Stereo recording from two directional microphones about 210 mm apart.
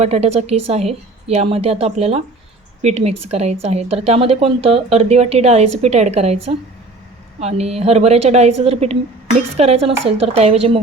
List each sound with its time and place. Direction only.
0.0 s a woman's voice: 30° right (ahead or behind)